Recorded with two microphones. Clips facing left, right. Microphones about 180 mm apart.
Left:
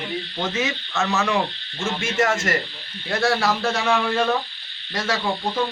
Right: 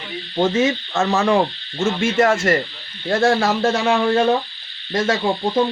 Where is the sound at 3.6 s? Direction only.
25° right (ahead or behind).